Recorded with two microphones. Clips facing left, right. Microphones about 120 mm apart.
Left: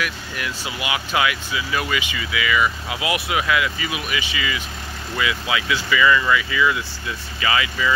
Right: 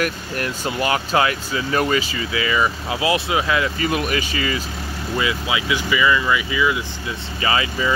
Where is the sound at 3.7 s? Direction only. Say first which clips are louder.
Right 6 dB; 45° right (ahead or behind).